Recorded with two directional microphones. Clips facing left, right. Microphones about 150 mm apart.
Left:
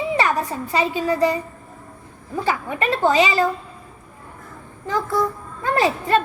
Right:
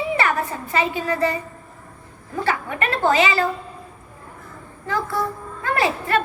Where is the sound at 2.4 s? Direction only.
15° left (ahead or behind).